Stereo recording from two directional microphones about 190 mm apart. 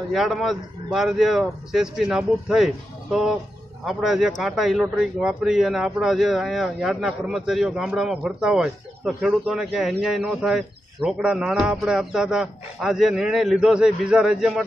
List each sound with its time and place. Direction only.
0.1 s speech: centre (ahead or behind)